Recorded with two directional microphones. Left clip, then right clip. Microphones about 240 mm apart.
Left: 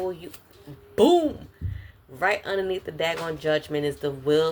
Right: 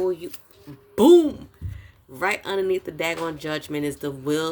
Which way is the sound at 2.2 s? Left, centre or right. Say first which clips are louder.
Even; right.